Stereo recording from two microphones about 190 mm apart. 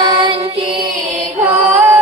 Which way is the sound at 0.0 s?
25° right (ahead or behind).